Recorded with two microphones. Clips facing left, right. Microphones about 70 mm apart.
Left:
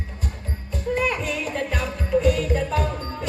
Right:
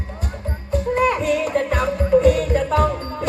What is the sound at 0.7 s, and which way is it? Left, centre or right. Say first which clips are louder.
Music: right 6 dB; right.